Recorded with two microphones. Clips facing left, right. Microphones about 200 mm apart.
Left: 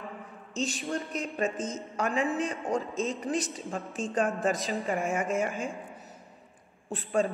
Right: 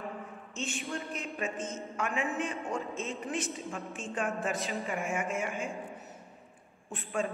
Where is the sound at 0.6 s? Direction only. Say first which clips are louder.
Left 5 dB; 40° left (ahead or behind).